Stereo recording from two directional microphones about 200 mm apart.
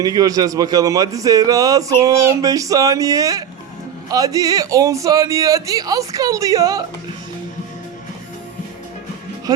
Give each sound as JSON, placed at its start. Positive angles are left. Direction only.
{"t": 0.0, "sound": "a man's voice", "side_deg": -20}
{"t": 9.5, "sound": "speech", "side_deg": -20}